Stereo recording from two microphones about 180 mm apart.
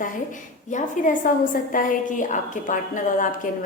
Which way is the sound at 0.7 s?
45° left (ahead or behind).